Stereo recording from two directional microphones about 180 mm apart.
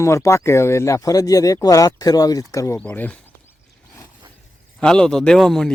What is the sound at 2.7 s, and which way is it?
Speech, 10° left (ahead or behind).